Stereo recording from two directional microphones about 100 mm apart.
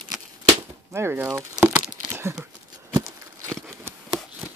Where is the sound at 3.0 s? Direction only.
30° right (ahead or behind).